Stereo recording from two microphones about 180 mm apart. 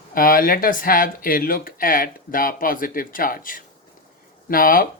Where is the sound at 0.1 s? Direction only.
50° left (ahead or behind).